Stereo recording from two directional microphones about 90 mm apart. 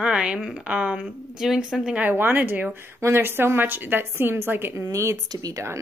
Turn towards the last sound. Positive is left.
turn(degrees=-45)  # may be behind; listen again after turning